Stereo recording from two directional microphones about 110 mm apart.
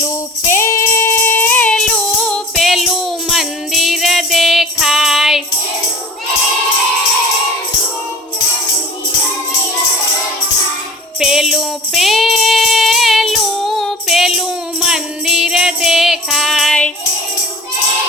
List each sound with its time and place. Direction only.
0.0 s music: 25° left (ahead or behind); by 5.4 s centre (ahead or behind)
11.2 s jingle bell: 5° right (ahead or behind)